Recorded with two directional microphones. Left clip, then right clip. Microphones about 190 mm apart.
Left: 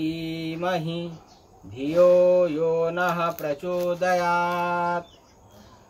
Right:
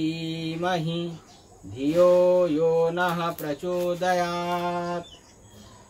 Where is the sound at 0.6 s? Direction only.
20° right (ahead or behind).